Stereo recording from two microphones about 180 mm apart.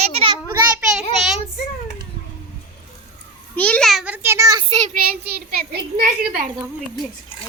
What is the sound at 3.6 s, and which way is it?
Speech, 5° left (ahead or behind).